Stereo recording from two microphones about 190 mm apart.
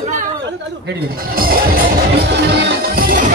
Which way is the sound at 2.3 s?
65° right (ahead or behind).